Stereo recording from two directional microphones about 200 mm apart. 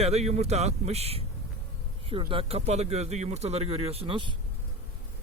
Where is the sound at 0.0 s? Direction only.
30° right (ahead or behind).